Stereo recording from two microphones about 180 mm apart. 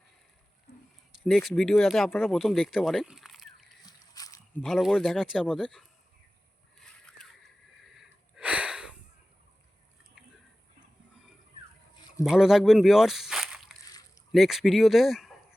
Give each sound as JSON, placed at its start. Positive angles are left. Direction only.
{"t": 1.1, "sound": "speech", "side_deg": 0}
{"t": 3.8, "sound": "a sound", "side_deg": 20}
{"t": 4.6, "sound": "speech", "side_deg": 0}
{"t": 6.7, "sound": "wheeze", "side_deg": 5}
{"t": 12.2, "sound": "speech", "side_deg": 0}
{"t": 13.8, "sound": "a sound", "side_deg": 20}
{"t": 14.3, "sound": "speech", "side_deg": 0}